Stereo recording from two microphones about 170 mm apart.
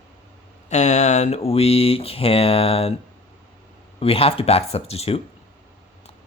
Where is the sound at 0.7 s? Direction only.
40° left (ahead or behind).